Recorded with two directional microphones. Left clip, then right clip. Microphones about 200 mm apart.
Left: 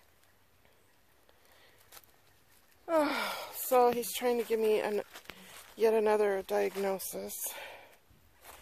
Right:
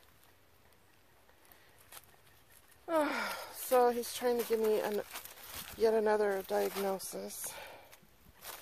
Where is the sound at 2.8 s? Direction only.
40° left (ahead or behind).